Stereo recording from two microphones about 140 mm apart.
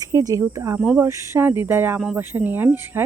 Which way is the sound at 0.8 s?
10° right (ahead or behind).